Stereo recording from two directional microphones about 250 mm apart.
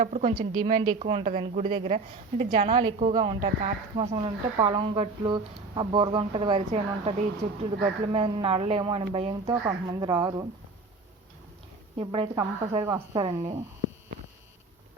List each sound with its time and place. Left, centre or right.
0.0 s speech: right; by 10.4 s centre
11.9 s speech: centre